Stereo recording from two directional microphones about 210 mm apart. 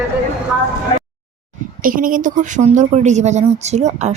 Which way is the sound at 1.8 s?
40° right (ahead or behind).